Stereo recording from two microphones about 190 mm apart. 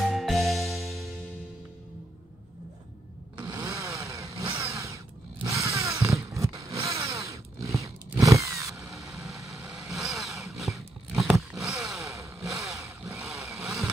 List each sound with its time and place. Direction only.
0.1 s music: centre (ahead or behind)
3.3 s motorcycle: 20° right (ahead or behind)
9.4 s vehicle: 15° right (ahead or behind)
9.9 s vehicle: centre (ahead or behind)
10.6 s a sound: centre (ahead or behind)
12.0 s vehicle: 15° right (ahead or behind)